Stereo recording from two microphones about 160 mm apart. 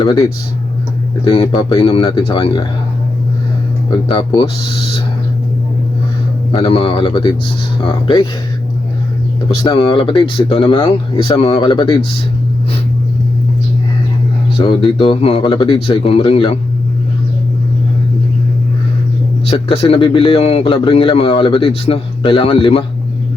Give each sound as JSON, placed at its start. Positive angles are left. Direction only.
{"t": 0.0, "sound": "a man's voice", "side_deg": 25}
{"t": 3.8, "sound": "a man's voice", "side_deg": 30}
{"t": 6.5, "sound": "a man's voice", "side_deg": 30}
{"t": 9.6, "sound": "a man's voice", "side_deg": 30}
{"t": 14.6, "sound": "a man's voice", "side_deg": 30}
{"t": 19.5, "sound": "a man's voice", "side_deg": 35}